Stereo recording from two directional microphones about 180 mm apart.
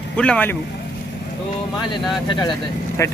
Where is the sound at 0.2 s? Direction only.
5° left (ahead or behind).